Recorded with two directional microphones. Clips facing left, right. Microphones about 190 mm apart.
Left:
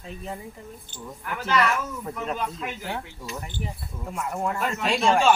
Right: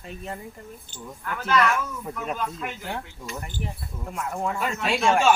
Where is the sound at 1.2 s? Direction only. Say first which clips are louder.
Right 1 dB; 15° left (ahead or behind).